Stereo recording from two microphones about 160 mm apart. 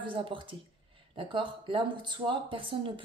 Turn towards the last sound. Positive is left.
turn(degrees=-35)  # may be behind; listen again after turning